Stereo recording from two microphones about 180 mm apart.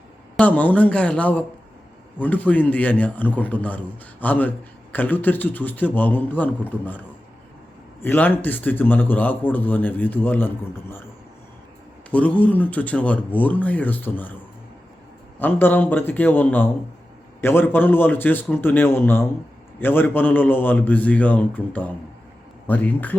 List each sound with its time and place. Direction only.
0.3 s a man's voice: 10° left (ahead or behind)
8.0 s a man's voice: 10° left (ahead or behind)
12.1 s a man's voice: 10° left (ahead or behind)
15.4 s a man's voice: 10° left (ahead or behind)